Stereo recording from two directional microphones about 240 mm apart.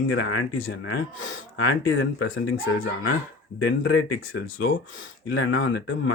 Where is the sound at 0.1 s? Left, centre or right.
Left.